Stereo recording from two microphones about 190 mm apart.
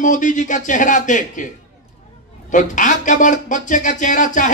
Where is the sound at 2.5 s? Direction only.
40° left (ahead or behind).